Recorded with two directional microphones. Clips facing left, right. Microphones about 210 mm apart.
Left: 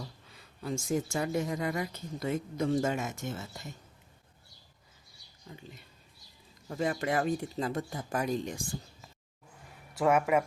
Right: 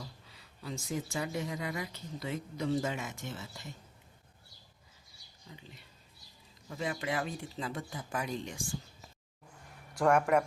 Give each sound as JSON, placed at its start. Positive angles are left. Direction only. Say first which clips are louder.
{"t": 0.3, "sound": "a woman's voice", "louder": "left 6 dB", "side_deg": 50}
{"t": 5.5, "sound": "a sound", "louder": "left 4 dB", "side_deg": 50}
{"t": 6.7, "sound": "a woman's voice", "louder": "left 5 dB", "side_deg": 45}
{"t": 10.0, "sound": "speech", "louder": "left 1 dB", "side_deg": 5}